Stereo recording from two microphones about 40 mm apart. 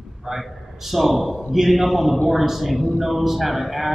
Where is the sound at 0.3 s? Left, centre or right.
Centre.